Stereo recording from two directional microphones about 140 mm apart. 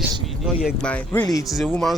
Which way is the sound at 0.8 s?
10° left (ahead or behind).